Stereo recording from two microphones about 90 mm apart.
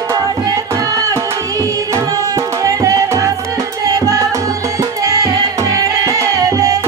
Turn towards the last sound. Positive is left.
turn(degrees=-40)  # may be behind; listen again after turning